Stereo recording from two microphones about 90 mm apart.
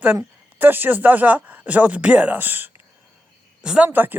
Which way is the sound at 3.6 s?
10° right (ahead or behind).